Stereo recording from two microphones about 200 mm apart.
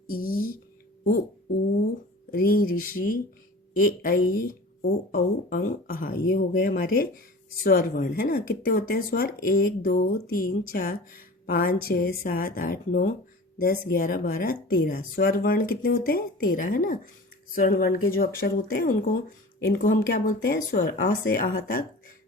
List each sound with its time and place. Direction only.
0.1 s a sound: 45° left (ahead or behind)
2.3 s a woman's voice: 45° left (ahead or behind)
4.4 s a woman's voice: 45° left (ahead or behind)